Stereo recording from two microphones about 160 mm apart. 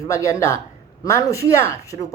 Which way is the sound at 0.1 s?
20° left (ahead or behind).